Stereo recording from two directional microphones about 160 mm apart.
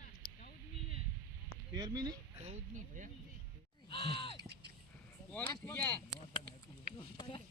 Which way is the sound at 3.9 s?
35° left (ahead or behind).